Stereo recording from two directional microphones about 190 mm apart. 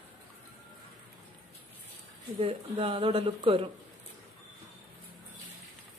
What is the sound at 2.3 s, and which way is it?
Speech, 30° right (ahead or behind).